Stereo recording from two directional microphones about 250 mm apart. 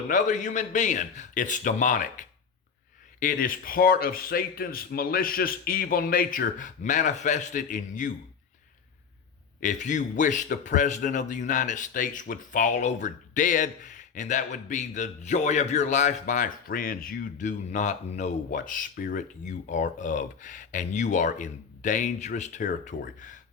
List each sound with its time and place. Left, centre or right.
0.1 s a man's voice: left
9.6 s a man's voice: left